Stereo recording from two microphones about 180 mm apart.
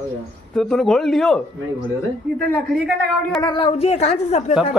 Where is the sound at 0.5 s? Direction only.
Centre (ahead or behind).